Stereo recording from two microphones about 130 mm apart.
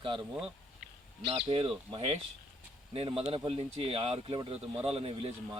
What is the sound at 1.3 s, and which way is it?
Speech, 45° right (ahead or behind).